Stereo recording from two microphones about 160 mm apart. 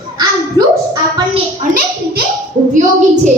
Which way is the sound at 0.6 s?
25° right (ahead or behind).